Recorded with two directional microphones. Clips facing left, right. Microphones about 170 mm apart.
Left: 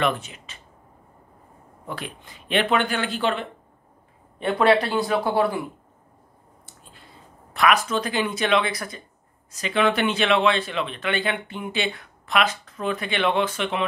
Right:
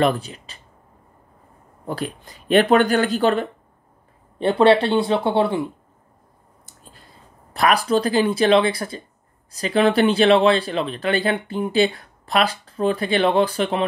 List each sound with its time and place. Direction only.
0.0 s speech: 35° right (ahead or behind)
1.9 s speech: 40° right (ahead or behind)
4.4 s speech: 30° right (ahead or behind)
6.6 s a sound: 40° right (ahead or behind)
7.5 s speech: 35° right (ahead or behind)